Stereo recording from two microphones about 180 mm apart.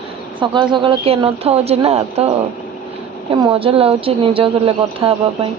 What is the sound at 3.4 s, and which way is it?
Speech, 30° right (ahead or behind).